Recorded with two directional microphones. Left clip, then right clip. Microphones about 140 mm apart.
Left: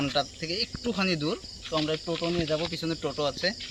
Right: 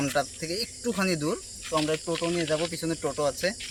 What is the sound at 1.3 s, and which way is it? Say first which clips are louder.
Speech: right 2 dB; 10° right (ahead or behind).